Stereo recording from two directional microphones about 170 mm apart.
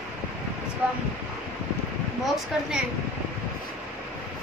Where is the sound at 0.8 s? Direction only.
5° right (ahead or behind).